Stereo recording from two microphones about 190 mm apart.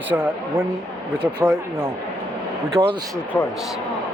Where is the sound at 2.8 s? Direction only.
15° right (ahead or behind).